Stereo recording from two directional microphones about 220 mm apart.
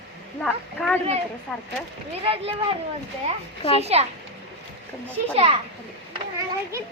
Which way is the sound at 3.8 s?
30° right (ahead or behind).